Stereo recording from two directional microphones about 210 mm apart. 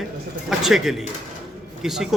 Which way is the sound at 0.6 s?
Centre (ahead or behind).